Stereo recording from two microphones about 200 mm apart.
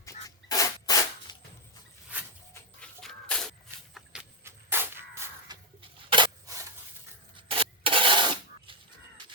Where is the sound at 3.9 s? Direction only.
5° right (ahead or behind).